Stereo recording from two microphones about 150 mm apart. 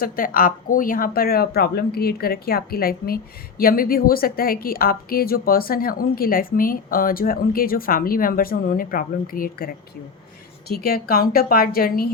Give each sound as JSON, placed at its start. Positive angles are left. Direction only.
{"t": 0.0, "sound": "speech", "side_deg": 70}
{"t": 3.6, "sound": "a woman's voice", "side_deg": 75}
{"t": 10.7, "sound": "speech", "side_deg": 90}